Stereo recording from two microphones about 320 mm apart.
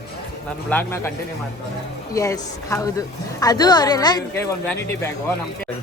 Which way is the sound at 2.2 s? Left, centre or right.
Centre.